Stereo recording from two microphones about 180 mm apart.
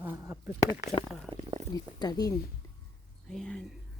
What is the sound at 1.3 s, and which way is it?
Speech, 30° right (ahead or behind).